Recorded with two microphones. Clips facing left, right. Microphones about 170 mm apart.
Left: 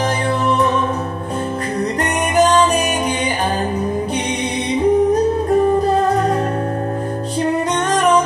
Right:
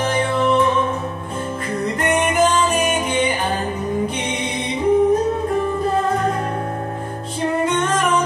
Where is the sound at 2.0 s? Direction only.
40° left (ahead or behind).